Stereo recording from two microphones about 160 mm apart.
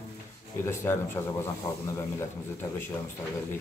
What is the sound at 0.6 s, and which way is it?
Speech, 15° left (ahead or behind).